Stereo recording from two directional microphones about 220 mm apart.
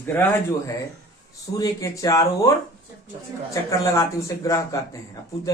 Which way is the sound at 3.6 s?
15° left (ahead or behind).